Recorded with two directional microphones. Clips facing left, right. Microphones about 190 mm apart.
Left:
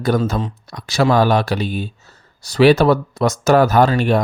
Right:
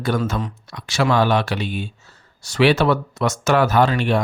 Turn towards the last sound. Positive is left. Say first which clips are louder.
# left 3 dB
turn(degrees=40)  # may be behind; listen again after turning